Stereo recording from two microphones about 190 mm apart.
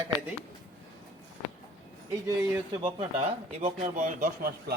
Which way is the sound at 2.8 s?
30° right (ahead or behind).